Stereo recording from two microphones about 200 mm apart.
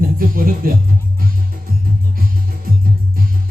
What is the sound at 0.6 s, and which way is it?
Speech, 45° right (ahead or behind).